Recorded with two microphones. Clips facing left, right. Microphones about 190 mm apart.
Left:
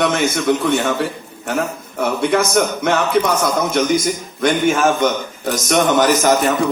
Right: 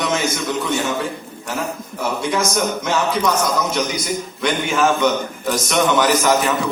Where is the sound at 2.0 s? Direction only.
60° left (ahead or behind).